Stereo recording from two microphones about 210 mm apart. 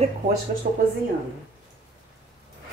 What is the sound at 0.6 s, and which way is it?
Speech, 45° right (ahead or behind).